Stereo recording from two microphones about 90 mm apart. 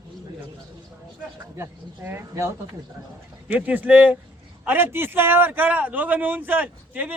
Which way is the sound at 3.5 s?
15° right (ahead or behind).